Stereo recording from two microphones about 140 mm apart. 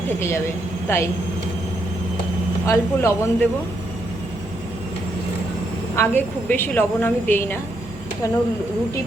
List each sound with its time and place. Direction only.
0.2 s a woman's voice: 20° left (ahead or behind)
2.6 s a woman's voice: 20° left (ahead or behind)
6.0 s a woman's voice: 15° left (ahead or behind)